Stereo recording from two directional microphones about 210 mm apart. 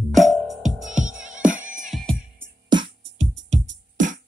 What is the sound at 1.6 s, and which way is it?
Music, 35° right (ahead or behind).